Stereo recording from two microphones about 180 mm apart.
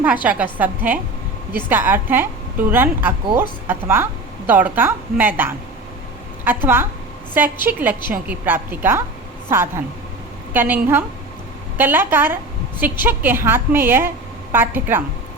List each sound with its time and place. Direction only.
0.0 s a woman's voice: 10° right (ahead or behind)